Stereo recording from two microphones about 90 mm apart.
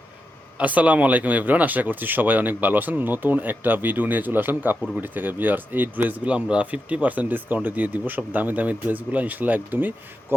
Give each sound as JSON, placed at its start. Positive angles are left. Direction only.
{"t": 0.6, "sound": "speech", "side_deg": -15}